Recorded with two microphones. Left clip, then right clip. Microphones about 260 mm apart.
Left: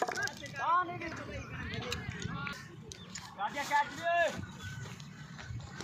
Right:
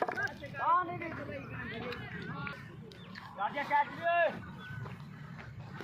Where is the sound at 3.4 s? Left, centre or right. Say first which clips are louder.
Right 1 dB; centre.